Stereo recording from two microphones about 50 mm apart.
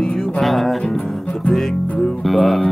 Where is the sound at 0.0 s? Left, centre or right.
Centre.